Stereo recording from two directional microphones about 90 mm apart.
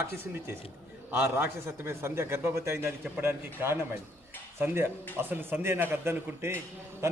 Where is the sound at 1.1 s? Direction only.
25° right (ahead or behind).